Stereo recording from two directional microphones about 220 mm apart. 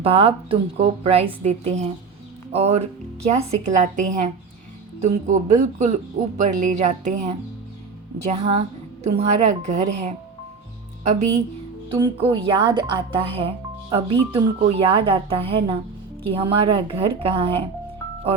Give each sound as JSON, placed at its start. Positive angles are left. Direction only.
{"t": 0.0, "sound": "speech", "side_deg": -25}
{"t": 11.9, "sound": "speech", "side_deg": -20}